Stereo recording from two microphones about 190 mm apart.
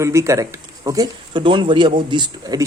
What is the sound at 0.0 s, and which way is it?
Speech, 15° right (ahead or behind).